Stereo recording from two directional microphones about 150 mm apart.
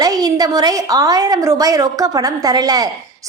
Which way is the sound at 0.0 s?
25° right (ahead or behind).